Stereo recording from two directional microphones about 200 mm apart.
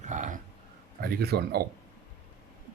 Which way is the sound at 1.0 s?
50° right (ahead or behind).